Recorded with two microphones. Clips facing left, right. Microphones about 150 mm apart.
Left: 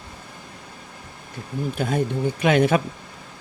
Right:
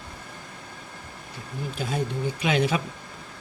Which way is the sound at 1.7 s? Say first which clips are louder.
Left 5 dB; 55° left (ahead or behind).